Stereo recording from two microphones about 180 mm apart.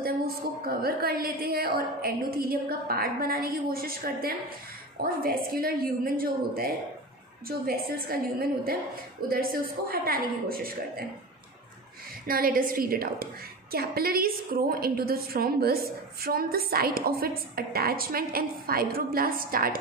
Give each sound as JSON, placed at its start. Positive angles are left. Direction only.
{"t": 0.0, "sound": "a woman's voice", "side_deg": -55}
{"t": 12.3, "sound": "a woman's voice", "side_deg": -55}